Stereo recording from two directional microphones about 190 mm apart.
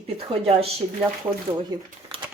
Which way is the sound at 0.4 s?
30° right (ahead or behind).